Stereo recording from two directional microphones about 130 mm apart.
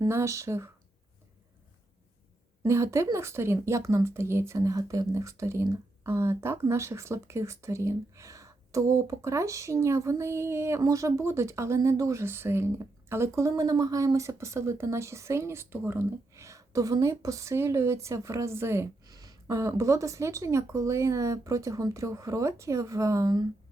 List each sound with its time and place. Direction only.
0.0 s speech: 20° right (ahead or behind)
2.6 s speech: 20° right (ahead or behind)